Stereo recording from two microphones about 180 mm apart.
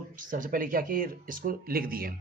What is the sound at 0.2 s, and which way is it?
A man's voice, 45° right (ahead or behind).